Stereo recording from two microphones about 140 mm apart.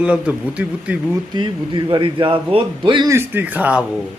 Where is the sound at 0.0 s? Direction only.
10° right (ahead or behind).